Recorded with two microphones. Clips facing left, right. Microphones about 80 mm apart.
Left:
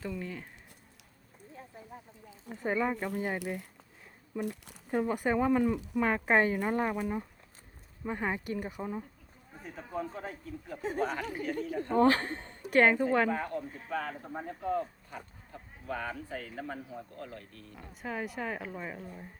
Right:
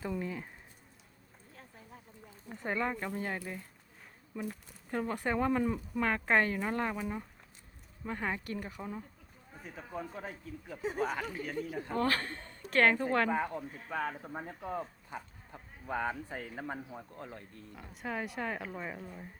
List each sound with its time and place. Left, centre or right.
0.2 s a sound: centre
2.5 s speech: centre
4.4 s speech: left
4.9 s speech: centre
9.6 s a man's voice: centre
11.9 s speech: left
12.6 s speech: centre
13.3 s speech: centre
17.7 s a man's voice: centre